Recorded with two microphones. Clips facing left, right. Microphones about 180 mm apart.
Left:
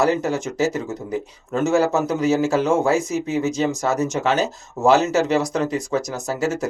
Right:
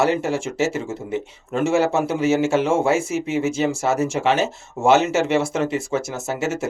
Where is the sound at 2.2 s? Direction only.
25° right (ahead or behind).